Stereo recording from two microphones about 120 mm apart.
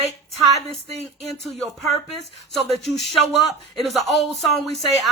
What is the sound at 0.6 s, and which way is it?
Speech, 60° right (ahead or behind).